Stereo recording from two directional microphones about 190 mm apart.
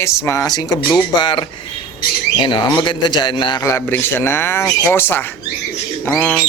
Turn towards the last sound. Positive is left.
turn(degrees=10)  # may be behind; listen again after turning